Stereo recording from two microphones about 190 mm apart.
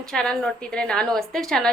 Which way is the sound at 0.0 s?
5° left (ahead or behind).